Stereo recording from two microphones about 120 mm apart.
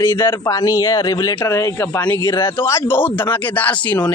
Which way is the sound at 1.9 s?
15° left (ahead or behind).